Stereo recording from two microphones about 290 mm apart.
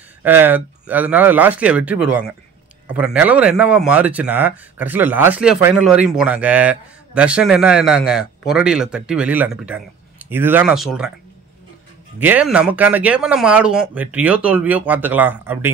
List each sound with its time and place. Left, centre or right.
0.2 s speech: centre
12.2 s speech: centre